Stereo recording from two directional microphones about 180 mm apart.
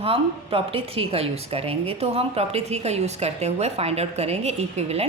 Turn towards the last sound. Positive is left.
turn(degrees=-35)  # may be behind; listen again after turning